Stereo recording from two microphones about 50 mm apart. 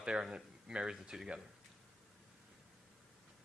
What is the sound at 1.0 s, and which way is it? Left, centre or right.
Speech, centre.